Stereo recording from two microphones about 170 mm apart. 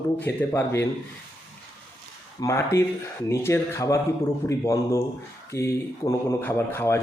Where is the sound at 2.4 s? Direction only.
15° left (ahead or behind).